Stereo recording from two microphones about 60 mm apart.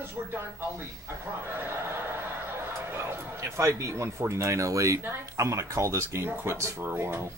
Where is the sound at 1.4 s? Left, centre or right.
Right.